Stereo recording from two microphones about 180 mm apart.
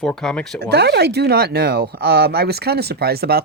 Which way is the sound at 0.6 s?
65° right (ahead or behind).